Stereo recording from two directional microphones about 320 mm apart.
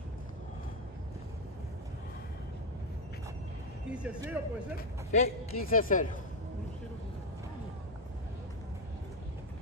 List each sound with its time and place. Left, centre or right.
3.9 s speech: centre
5.1 s a man's voice: left